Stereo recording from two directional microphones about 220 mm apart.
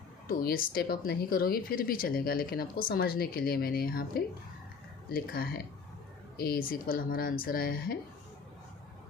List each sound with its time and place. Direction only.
0.3 s speech: 40° left (ahead or behind)